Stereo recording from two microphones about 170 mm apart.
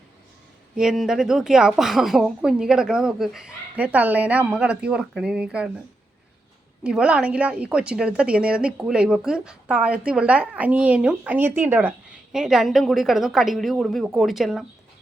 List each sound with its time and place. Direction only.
0.8 s a woman's voice: 5° right (ahead or behind)
6.8 s a woman's voice: 5° right (ahead or behind)